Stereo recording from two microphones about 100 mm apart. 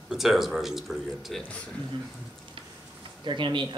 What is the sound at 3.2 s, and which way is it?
Speech, 50° right (ahead or behind).